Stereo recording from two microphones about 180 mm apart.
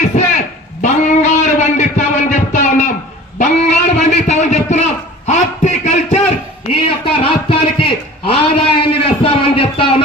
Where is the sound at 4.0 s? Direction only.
40° left (ahead or behind).